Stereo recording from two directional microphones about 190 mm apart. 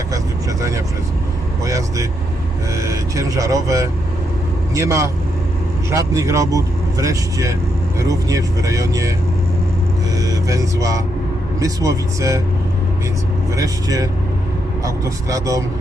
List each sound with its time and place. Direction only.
1.6 s vehicle: 15° right (ahead or behind)
2.7 s music: 15° right (ahead or behind)
4.7 s speech: 15° right (ahead or behind)
10.2 s speech: 15° right (ahead or behind)
13.6 s speech: 20° right (ahead or behind)